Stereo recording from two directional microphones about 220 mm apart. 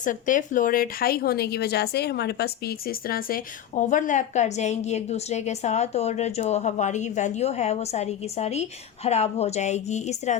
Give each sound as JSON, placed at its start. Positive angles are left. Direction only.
{"t": 0.0, "sound": "a woman's voice", "side_deg": 35}